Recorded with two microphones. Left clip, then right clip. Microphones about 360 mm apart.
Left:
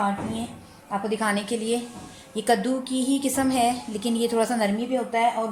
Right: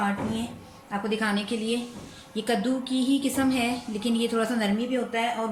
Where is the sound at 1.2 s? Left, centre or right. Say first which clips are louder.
Left 3 dB; centre.